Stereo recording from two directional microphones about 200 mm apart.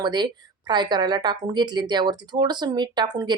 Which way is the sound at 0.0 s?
20° right (ahead or behind).